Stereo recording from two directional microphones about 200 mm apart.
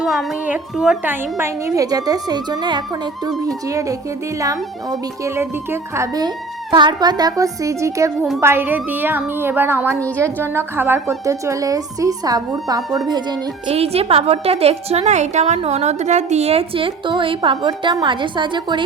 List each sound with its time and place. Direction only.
0.0 s speech: centre (ahead or behind); by 13.0 s 20° right (ahead or behind)
13.7 s a woman's voice: 30° right (ahead or behind)